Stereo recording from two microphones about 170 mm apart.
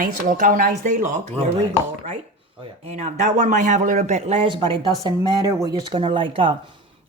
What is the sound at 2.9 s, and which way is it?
A man's voice, 40° right (ahead or behind).